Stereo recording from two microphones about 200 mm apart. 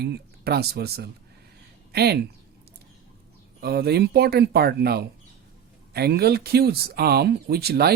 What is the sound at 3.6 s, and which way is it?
Speech, 55° right (ahead or behind).